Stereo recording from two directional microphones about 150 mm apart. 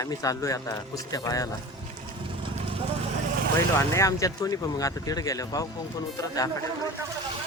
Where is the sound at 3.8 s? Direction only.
20° left (ahead or behind).